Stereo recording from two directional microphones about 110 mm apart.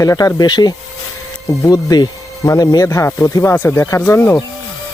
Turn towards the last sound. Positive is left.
turn(degrees=25)  # may be behind; listen again after turning